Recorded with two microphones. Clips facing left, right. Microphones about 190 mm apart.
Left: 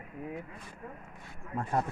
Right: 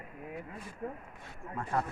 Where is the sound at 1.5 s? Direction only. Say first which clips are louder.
Left 2 dB; 25° left (ahead or behind).